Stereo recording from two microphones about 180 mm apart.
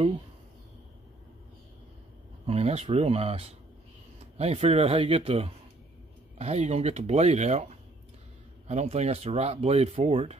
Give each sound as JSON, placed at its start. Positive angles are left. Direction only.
{"t": 2.4, "sound": "speech", "side_deg": -35}